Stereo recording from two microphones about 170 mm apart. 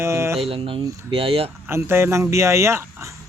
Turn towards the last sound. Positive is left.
turn(degrees=-15)  # may be behind; listen again after turning